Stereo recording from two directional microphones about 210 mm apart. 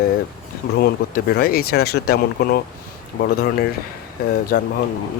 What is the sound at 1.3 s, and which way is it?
Speech, 45° left (ahead or behind).